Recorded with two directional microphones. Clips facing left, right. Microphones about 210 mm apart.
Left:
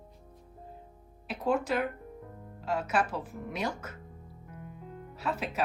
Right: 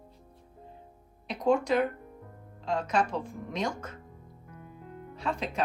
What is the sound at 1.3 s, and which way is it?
Speech, 5° left (ahead or behind).